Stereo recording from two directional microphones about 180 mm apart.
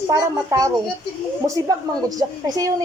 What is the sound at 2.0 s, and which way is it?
Speech, 20° right (ahead or behind).